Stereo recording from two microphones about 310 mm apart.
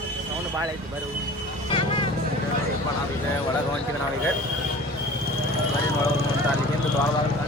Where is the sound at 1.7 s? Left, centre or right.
Centre.